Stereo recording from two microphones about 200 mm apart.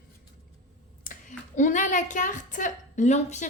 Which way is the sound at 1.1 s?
40° left (ahead or behind).